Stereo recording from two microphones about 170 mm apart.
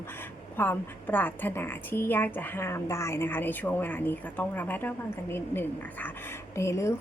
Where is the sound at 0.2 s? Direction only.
10° left (ahead or behind).